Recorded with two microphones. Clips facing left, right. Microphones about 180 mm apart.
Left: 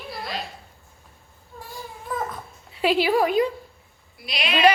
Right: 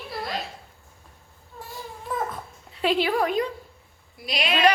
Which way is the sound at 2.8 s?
5° left (ahead or behind).